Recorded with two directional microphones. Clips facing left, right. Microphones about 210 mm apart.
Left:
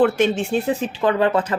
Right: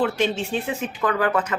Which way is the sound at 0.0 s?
50° left (ahead or behind).